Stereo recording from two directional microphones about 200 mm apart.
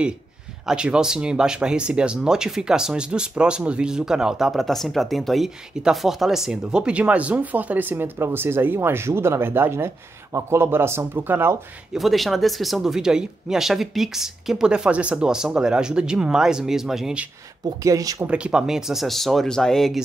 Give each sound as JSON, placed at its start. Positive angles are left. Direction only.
{"t": 0.7, "sound": "speech", "side_deg": -5}
{"t": 12.0, "sound": "speech", "side_deg": 0}
{"t": 17.8, "sound": "speech", "side_deg": -15}
{"t": 18.3, "sound": "speech", "side_deg": -5}